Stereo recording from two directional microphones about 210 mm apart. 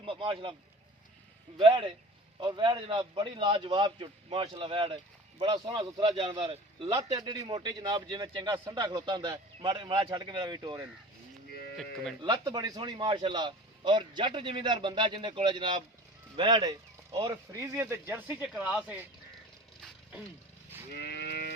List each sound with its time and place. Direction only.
0.0 s vehicle: 25° right (ahead or behind)
1.5 s a man's voice: 25° right (ahead or behind)
12.2 s a man's voice: 20° right (ahead or behind)
20.9 s livestock: 50° left (ahead or behind)